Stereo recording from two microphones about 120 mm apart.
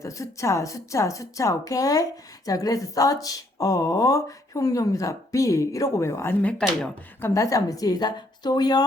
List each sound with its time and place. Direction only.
0.0 s a woman's voice: 25° left (ahead or behind)
6.4 s speech: 10° left (ahead or behind)
7.2 s a woman's voice: 25° left (ahead or behind)